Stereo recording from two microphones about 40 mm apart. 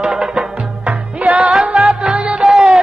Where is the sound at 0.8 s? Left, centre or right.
Right.